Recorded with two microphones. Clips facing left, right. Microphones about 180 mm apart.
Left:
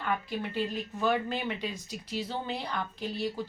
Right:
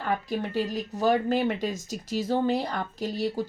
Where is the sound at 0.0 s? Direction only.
40° right (ahead or behind).